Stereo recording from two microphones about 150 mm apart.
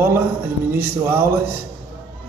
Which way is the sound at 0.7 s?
15° right (ahead or behind).